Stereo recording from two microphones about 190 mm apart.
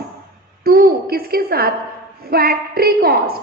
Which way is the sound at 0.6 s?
55° right (ahead or behind).